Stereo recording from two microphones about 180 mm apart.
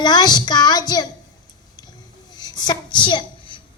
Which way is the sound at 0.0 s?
25° left (ahead or behind).